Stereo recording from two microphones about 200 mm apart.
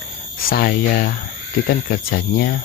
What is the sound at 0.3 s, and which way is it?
Speech, 45° left (ahead or behind).